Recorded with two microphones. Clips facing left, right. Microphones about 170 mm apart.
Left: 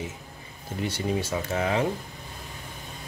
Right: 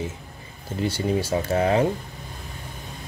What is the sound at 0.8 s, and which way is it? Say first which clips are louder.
A man's voice: right 4 dB; 30° right (ahead or behind).